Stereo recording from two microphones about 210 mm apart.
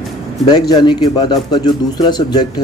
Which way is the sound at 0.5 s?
20° left (ahead or behind).